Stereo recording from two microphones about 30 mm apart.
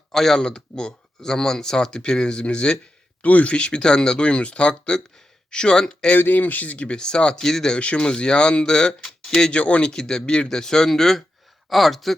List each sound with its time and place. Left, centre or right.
0.1 s speech: centre
0.5 s speech: left
3.2 s speech: left
3.5 s speech: left
3.8 s speech: left
4.3 s speech: left
4.7 s speech: left
6.1 s speech: left
6.9 s speech: left
7.3 s speech: centre
7.8 s speech: left
9.5 s speech: left
9.8 s speech: left
11.7 s speech: centre